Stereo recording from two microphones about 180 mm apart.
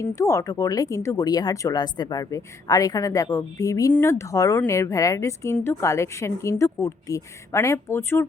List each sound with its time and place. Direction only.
0.0 s speech: 15° left (ahead or behind)